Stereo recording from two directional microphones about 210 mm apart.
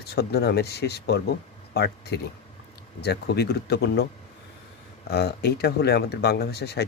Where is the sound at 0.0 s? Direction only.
50° left (ahead or behind).